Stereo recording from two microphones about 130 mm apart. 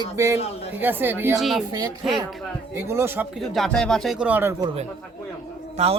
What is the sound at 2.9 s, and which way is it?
Speech, 20° right (ahead or behind).